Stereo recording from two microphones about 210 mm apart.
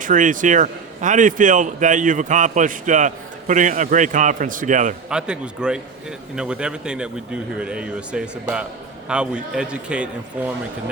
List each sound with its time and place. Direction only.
0.0 s a man's voice: 40° right (ahead or behind)
5.0 s speech: 5° right (ahead or behind)